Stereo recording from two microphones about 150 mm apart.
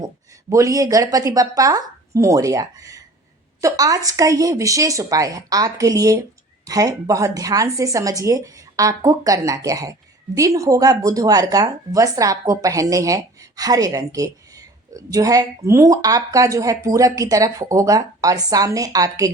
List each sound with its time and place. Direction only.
0.5 s a woman's voice: 20° right (ahead or behind)